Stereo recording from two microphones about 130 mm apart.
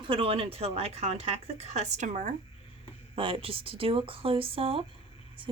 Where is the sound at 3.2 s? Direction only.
45° right (ahead or behind).